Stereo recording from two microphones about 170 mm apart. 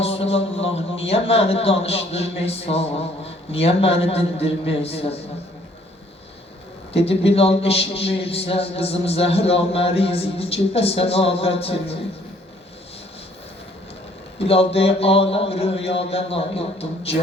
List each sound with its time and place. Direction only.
0.0 s a man's voice: 35° left (ahead or behind)
6.9 s a man's voice: 35° left (ahead or behind)
14.3 s a man's voice: 35° left (ahead or behind)